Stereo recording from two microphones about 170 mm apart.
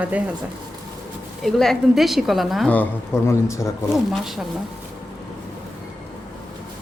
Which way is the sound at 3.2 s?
15° left (ahead or behind).